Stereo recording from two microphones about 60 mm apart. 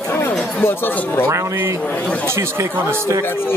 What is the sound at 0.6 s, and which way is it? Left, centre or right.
Speech, left.